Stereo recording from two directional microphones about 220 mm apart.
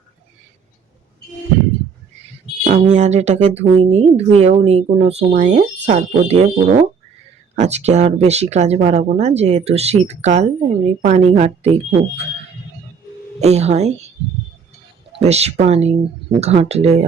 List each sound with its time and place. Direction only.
2.6 s speech: 35° right (ahead or behind)
13.4 s speech: 30° right (ahead or behind)
15.2 s speech: 30° right (ahead or behind)